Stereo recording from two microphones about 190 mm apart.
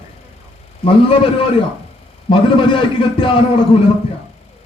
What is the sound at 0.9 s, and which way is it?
A man's voice, 30° left (ahead or behind).